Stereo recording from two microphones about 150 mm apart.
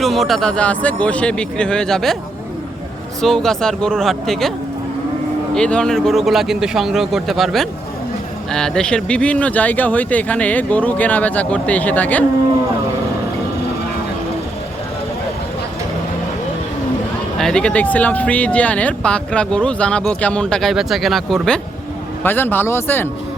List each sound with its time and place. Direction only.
0.0 s speech: centre (ahead or behind)
3.2 s speech: centre (ahead or behind)
5.5 s speech: 5° left (ahead or behind)
17.3 s speech: 5° left (ahead or behind)
22.2 s speech: 15° left (ahead or behind)